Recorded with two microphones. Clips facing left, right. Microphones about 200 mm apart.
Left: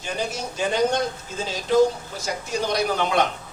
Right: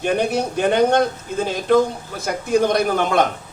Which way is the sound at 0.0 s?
60° right (ahead or behind).